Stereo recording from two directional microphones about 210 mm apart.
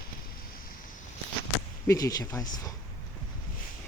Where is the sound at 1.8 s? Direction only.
15° left (ahead or behind).